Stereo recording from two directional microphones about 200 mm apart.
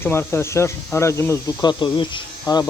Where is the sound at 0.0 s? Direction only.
10° left (ahead or behind).